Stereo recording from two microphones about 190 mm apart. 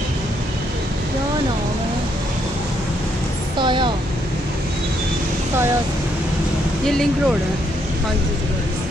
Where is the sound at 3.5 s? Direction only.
25° right (ahead or behind).